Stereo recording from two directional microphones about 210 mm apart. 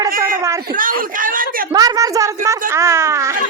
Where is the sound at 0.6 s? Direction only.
40° right (ahead or behind).